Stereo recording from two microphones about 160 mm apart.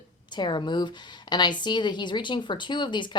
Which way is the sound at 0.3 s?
30° left (ahead or behind).